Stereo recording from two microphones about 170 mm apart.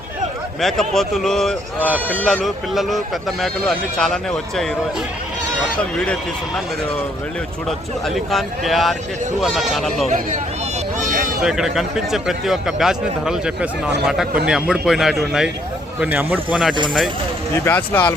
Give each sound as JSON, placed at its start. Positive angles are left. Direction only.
{"t": 0.6, "sound": "speech", "side_deg": 0}
{"t": 8.0, "sound": "speech", "side_deg": 0}
{"t": 11.0, "sound": "a sound", "side_deg": -55}
{"t": 11.4, "sound": "speech", "side_deg": 0}
{"t": 17.5, "sound": "speech", "side_deg": 10}